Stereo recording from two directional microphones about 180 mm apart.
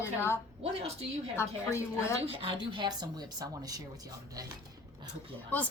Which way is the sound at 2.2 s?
30° right (ahead or behind).